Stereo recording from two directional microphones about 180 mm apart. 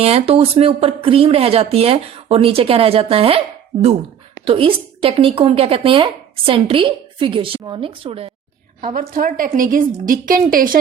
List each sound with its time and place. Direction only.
0.0 s speech: 35° right (ahead or behind)
8.8 s a woman's voice: 50° right (ahead or behind)